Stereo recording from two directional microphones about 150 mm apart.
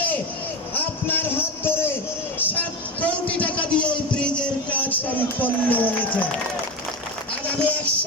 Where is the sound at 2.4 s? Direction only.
10° left (ahead or behind).